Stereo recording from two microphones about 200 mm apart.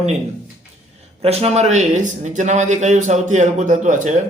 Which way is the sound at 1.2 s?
30° right (ahead or behind).